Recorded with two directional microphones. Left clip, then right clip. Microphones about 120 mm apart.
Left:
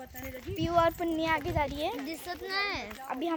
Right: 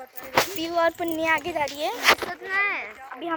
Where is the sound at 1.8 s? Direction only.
10° right (ahead or behind).